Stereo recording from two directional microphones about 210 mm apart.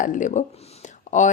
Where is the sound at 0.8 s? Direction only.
35° left (ahead or behind).